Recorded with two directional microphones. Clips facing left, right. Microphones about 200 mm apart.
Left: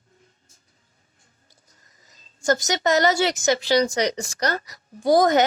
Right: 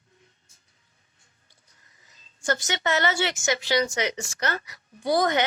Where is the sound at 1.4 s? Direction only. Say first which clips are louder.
Left 4 dB; 40° left (ahead or behind).